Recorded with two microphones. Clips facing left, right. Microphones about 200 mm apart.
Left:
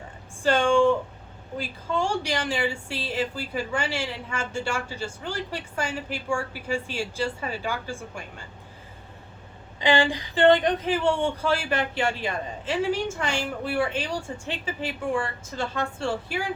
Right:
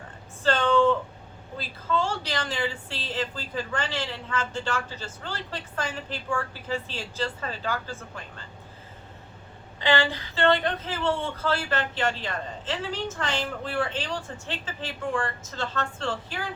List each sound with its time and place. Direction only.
0.4 s a sound: 10° left (ahead or behind)
1.5 s a woman's voice: 15° left (ahead or behind)
9.8 s a woman's voice: 15° left (ahead or behind)